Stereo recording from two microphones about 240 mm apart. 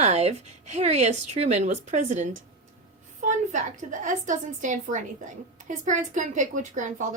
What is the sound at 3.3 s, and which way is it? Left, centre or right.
A woman's voice, right.